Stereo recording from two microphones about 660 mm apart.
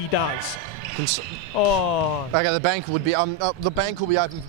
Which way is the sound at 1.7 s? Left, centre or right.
Left.